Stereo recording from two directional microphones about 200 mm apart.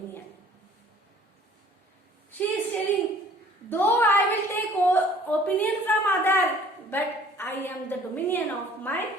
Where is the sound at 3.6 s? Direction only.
10° left (ahead or behind).